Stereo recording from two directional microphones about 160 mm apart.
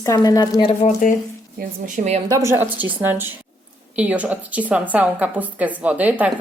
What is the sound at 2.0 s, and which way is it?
Speech, 50° right (ahead or behind).